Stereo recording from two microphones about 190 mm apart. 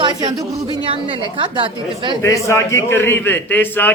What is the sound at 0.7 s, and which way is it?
A woman's voice, 25° right (ahead or behind).